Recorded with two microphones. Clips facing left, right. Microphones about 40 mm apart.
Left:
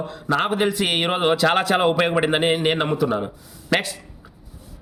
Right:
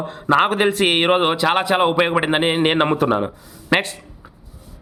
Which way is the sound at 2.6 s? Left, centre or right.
Right.